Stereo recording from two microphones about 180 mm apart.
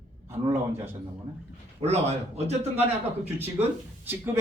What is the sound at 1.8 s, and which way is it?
Speech, 35° right (ahead or behind).